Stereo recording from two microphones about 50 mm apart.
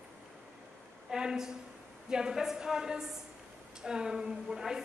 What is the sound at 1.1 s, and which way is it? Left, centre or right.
A woman's voice, centre.